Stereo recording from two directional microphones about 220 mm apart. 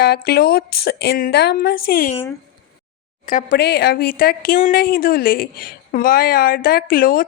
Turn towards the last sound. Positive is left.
turn(degrees=40)  # may be behind; listen again after turning